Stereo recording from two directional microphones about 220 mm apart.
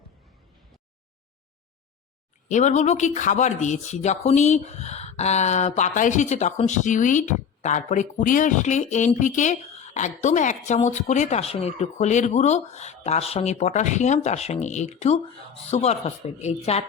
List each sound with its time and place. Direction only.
2.5 s speech: 35° left (ahead or behind)